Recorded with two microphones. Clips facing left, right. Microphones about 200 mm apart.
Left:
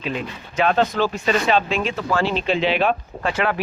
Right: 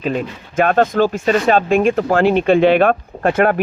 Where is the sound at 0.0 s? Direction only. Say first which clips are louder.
Right 6 dB; 45° right (ahead or behind).